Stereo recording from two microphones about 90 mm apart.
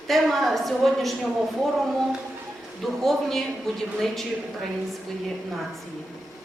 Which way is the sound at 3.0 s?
5° left (ahead or behind).